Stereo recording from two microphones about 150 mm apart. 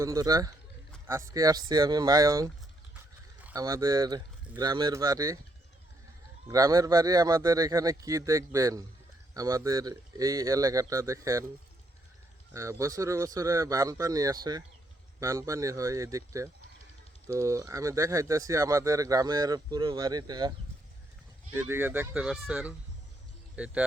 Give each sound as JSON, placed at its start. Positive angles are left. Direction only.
{"t": 0.0, "sound": "speech", "side_deg": -25}
{"t": 3.5, "sound": "speech", "side_deg": -25}
{"t": 6.5, "sound": "speech", "side_deg": -25}
{"t": 12.5, "sound": "speech", "side_deg": -20}
{"t": 21.5, "sound": "speech", "side_deg": -15}